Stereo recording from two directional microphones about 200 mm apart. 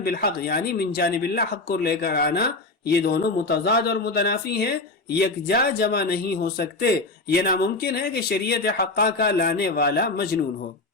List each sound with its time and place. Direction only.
0.0 s speech: 50° left (ahead or behind)